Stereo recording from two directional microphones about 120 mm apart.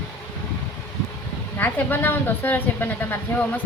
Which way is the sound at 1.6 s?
15° left (ahead or behind).